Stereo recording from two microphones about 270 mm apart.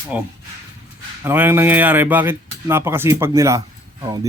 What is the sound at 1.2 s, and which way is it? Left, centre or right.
Speech, centre.